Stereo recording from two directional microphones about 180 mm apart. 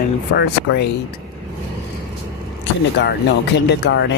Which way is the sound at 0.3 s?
60° left (ahead or behind).